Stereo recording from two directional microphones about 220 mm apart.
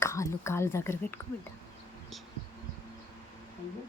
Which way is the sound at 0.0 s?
10° left (ahead or behind).